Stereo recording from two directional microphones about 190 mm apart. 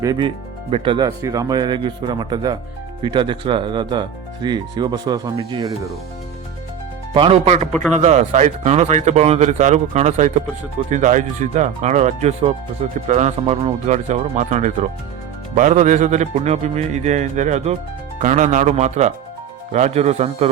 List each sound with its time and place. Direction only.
0.0 s speech: 20° right (ahead or behind)
7.1 s speech: 30° right (ahead or behind)
7.7 s speech: 10° left (ahead or behind)
7.9 s speech: 35° right (ahead or behind)